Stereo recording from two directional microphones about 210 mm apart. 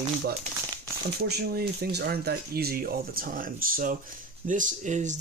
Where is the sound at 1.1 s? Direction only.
50° right (ahead or behind).